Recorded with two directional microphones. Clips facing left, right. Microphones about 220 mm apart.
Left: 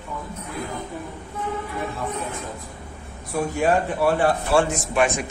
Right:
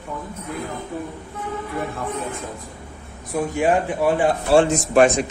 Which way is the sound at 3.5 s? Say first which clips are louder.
Right 1 dB; 15° right (ahead or behind).